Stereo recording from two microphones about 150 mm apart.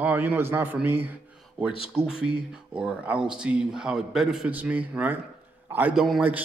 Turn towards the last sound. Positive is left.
turn(degrees=-5)  # may be behind; listen again after turning